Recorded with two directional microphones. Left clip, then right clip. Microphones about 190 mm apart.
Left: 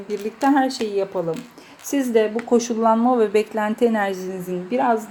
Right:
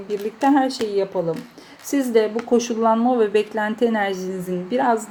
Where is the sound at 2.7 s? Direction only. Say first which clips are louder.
Left 1 dB; 20° left (ahead or behind).